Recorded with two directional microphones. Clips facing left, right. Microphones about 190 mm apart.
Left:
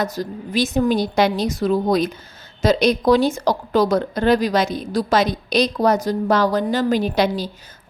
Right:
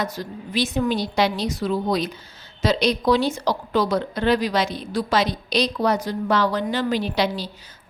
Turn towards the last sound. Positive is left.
turn(degrees=45)  # may be behind; listen again after turning